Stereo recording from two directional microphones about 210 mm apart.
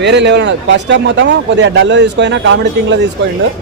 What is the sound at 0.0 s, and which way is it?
Speech, 55° right (ahead or behind).